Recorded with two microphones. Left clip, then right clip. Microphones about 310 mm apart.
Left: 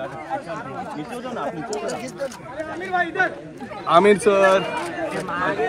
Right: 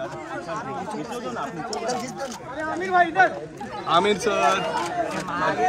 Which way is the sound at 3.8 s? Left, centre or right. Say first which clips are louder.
Left 6 dB; left.